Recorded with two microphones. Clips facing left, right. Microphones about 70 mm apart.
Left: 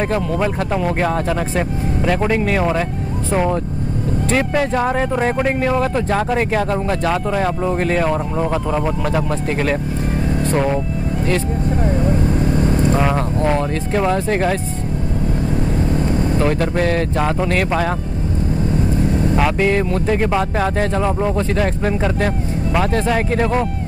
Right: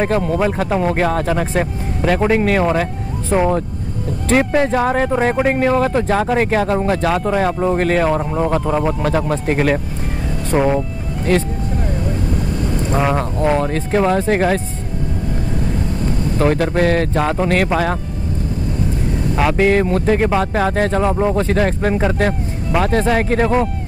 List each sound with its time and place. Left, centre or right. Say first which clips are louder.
0.0 s speech: right 2 dB; centre
12.5 s vehicle: left 4 dB; left
12.9 s speech: even; centre
16.3 s speech: right 6 dB; centre
19.3 s speech: right 4 dB; centre